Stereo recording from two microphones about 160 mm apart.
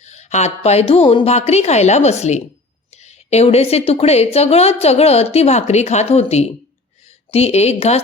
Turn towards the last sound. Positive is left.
turn(degrees=40)  # may be behind; listen again after turning